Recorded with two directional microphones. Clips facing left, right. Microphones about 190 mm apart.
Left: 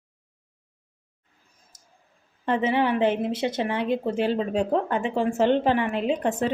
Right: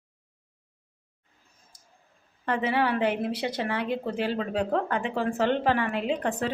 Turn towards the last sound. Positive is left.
turn(degrees=20)  # may be behind; listen again after turning